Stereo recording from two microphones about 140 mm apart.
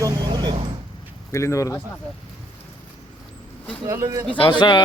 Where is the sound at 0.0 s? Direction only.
30° right (ahead or behind).